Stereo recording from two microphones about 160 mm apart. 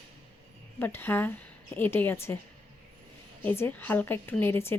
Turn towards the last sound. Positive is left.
turn(degrees=15)  # may be behind; listen again after turning